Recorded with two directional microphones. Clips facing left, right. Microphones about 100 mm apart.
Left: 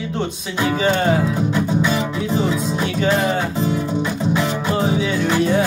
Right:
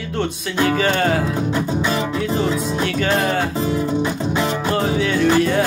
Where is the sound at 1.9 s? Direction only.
55° right (ahead or behind).